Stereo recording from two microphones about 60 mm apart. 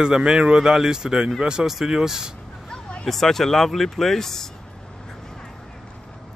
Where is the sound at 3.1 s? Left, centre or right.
Centre.